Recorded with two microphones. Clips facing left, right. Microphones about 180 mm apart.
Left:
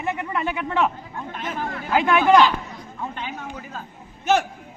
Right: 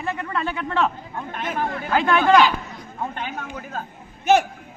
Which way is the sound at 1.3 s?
60° right (ahead or behind).